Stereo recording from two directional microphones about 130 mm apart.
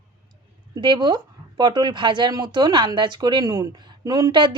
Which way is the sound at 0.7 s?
35° right (ahead or behind).